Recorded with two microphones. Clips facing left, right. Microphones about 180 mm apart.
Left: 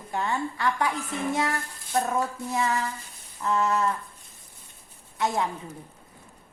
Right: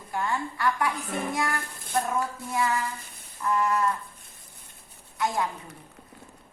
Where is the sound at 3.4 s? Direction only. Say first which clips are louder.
Left 1 dB; 25° left (ahead or behind).